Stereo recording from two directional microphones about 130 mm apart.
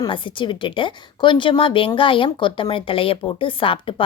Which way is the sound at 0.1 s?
40° left (ahead or behind).